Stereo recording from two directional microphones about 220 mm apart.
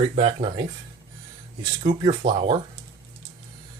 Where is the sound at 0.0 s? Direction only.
25° right (ahead or behind).